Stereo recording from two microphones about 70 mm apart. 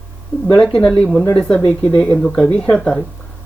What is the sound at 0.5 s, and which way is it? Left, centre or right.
Speech, centre.